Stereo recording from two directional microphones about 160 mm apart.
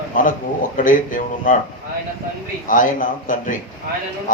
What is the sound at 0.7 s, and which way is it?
Speech, 55° left (ahead or behind).